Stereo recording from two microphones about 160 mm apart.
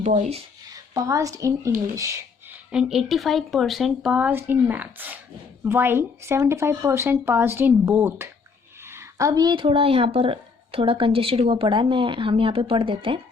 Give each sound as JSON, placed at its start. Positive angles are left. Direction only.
{"t": 0.0, "sound": "speech", "side_deg": -45}
{"t": 0.7, "sound": "a woman's voice", "side_deg": -20}
{"t": 2.0, "sound": "a sound", "side_deg": -20}
{"t": 2.7, "sound": "speech", "side_deg": 0}